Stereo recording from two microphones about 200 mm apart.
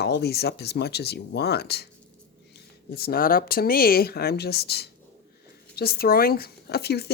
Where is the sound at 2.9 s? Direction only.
50° left (ahead or behind).